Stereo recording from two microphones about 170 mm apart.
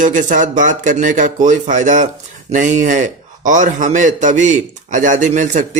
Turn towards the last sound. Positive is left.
turn(degrees=-45)  # may be behind; listen again after turning